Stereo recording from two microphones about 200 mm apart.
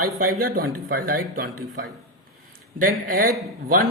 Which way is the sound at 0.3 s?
45° right (ahead or behind).